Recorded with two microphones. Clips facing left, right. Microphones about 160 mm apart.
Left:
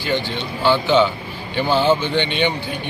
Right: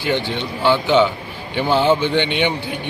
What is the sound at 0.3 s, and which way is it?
Speech, 15° right (ahead or behind).